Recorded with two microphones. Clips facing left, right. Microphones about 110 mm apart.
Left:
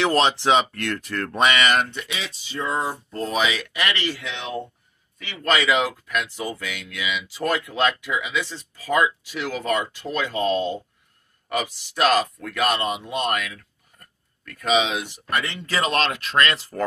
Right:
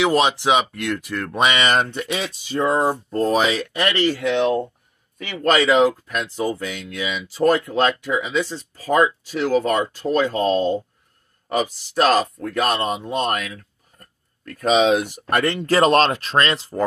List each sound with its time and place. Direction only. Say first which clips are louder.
0.0 s speech: right 2 dB; 10° right (ahead or behind)